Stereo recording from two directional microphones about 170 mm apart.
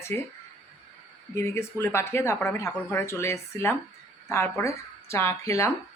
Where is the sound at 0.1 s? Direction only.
10° left (ahead or behind).